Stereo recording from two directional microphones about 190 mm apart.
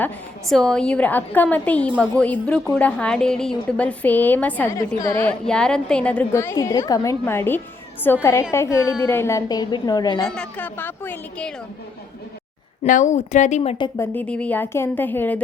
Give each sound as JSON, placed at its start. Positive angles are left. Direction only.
{"t": 0.0, "sound": "a woman's voice", "side_deg": 5}
{"t": 10.2, "sound": "a woman's voice", "side_deg": 5}
{"t": 12.8, "sound": "a woman's voice", "side_deg": 40}